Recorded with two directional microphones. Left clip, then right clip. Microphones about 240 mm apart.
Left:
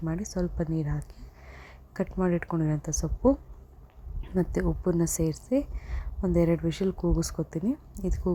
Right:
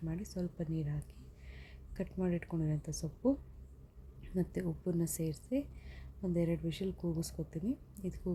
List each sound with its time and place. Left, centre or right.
0.0 s a woman's voice: centre
6.9 s speech: left
7.2 s a woman's voice: left